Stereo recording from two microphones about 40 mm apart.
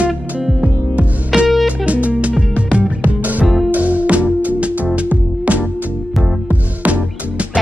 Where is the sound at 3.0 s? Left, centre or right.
Right.